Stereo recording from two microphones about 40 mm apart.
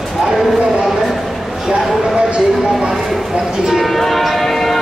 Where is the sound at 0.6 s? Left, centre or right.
Centre.